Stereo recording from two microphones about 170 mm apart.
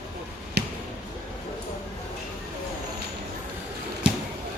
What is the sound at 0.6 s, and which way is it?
Basketball bounce, 75° right (ahead or behind).